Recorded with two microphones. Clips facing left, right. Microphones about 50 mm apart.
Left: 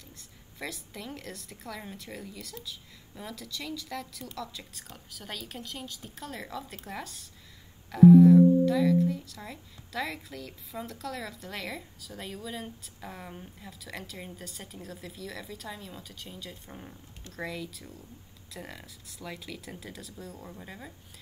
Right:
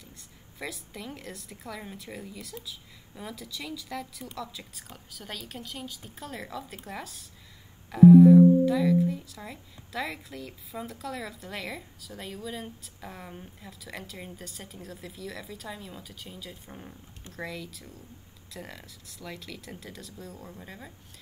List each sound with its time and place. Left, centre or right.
0.2 s speech: centre